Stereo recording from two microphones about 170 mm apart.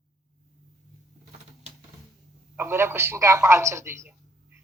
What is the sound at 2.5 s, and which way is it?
Speech, 15° right (ahead or behind).